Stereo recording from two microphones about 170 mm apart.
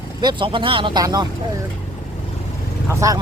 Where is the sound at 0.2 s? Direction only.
25° right (ahead or behind).